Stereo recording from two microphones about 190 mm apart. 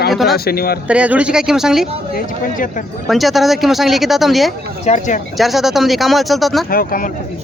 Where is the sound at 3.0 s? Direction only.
Centre (ahead or behind).